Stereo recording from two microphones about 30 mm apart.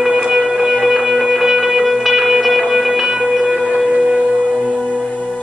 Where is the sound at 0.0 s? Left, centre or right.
Centre.